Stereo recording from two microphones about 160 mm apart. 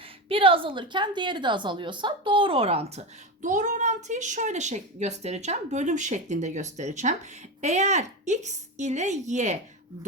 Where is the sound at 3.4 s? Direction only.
50° right (ahead or behind).